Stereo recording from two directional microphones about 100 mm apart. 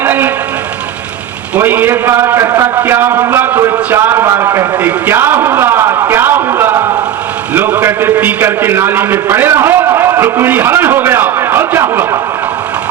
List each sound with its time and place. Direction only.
0.0 s vehicle: 20° right (ahead or behind)
1.5 s a man's voice: 20° right (ahead or behind)
4.9 s a sound: 20° right (ahead or behind)